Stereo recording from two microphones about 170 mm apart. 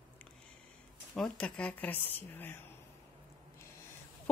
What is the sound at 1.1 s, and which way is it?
Speech, 5° left (ahead or behind).